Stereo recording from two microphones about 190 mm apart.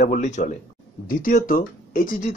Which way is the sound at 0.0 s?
40° left (ahead or behind).